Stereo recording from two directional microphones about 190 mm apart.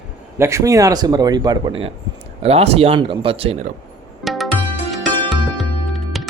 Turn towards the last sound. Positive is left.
turn(degrees=0)  # may be behind; listen again after turning